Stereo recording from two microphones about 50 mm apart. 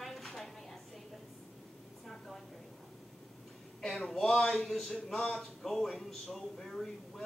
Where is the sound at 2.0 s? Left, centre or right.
Centre.